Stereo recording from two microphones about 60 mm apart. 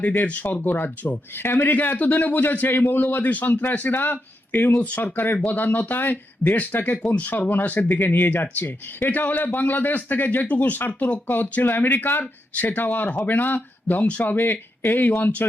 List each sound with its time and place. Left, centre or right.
0.0 s speech: left